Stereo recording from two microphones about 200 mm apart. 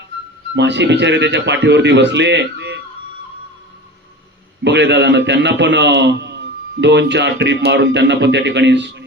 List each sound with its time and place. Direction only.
0.5 s a man's voice: 60° right (ahead or behind)
4.6 s a man's voice: 60° right (ahead or behind)